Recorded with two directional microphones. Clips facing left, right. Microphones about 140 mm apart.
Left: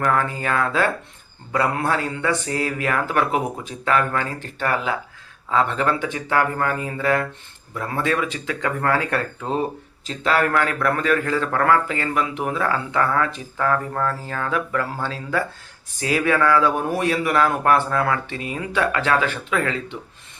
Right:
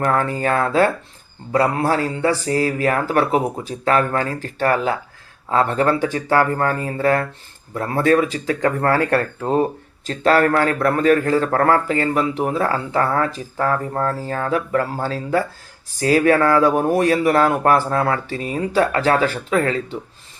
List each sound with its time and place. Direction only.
0.0 s a man's voice: 35° right (ahead or behind)